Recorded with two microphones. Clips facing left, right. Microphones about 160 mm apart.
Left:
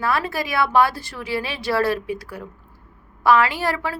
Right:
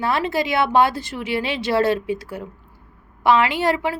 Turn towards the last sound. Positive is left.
turn(degrees=-20)  # may be behind; listen again after turning